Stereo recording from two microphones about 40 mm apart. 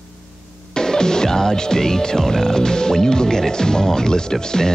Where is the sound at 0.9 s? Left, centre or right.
Centre.